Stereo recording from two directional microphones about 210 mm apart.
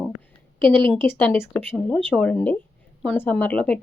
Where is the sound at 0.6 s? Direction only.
25° right (ahead or behind).